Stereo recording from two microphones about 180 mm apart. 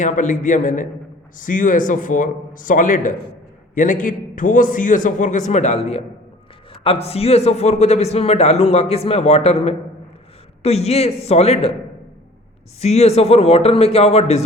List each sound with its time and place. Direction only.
0.0 s a man's voice: 45° left (ahead or behind)
12.8 s a man's voice: 35° left (ahead or behind)